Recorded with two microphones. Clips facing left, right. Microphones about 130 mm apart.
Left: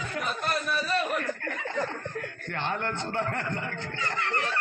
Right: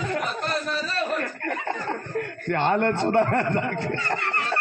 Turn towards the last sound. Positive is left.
turn(degrees=-60)  # may be behind; listen again after turning